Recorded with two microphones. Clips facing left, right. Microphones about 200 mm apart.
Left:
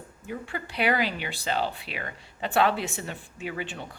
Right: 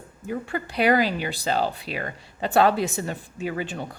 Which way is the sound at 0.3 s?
45° right (ahead or behind).